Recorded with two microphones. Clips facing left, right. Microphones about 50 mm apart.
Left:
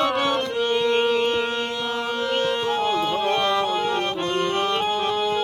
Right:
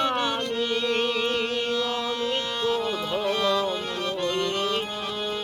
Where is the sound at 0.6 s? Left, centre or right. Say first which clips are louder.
Left 5 dB; left.